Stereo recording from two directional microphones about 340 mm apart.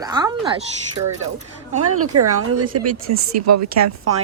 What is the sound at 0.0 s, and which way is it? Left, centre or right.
Speech, centre.